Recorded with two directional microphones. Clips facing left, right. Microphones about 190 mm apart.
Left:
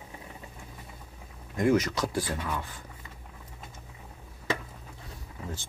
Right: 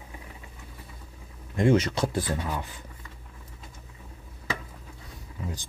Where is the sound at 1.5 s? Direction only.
25° right (ahead or behind).